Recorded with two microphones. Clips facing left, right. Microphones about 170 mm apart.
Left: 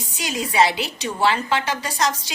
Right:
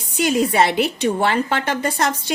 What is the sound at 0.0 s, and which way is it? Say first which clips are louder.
A woman's voice: right 9 dB; 55° right (ahead or behind).